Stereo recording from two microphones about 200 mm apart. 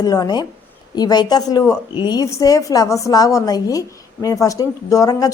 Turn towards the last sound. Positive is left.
turn(degrees=20)  # may be behind; listen again after turning